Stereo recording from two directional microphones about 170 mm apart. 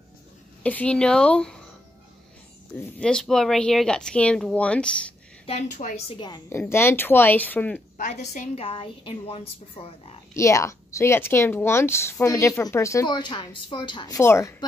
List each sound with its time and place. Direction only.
0.7 s speech: 5° left (ahead or behind)
3.0 s speech: 5° left (ahead or behind)
5.5 s a woman's voice: 45° left (ahead or behind); by 7.8 s 10° left (ahead or behind)
8.5 s speech: 35° left (ahead or behind)
10.3 s a woman's voice: 20° left (ahead or behind)